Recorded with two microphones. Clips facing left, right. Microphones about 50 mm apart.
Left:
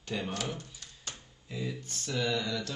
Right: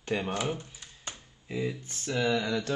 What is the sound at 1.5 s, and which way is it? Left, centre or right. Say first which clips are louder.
Speech: right 5 dB; right.